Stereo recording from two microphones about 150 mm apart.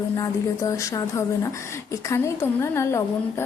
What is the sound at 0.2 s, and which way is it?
A woman's voice, 20° left (ahead or behind).